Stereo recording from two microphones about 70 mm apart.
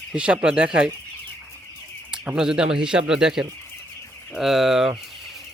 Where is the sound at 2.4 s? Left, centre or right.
Centre.